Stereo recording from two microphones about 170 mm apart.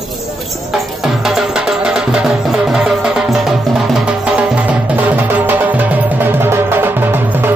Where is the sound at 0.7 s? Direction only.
Centre (ahead or behind).